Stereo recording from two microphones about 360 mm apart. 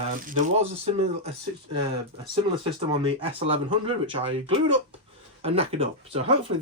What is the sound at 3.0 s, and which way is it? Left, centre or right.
Speech, centre.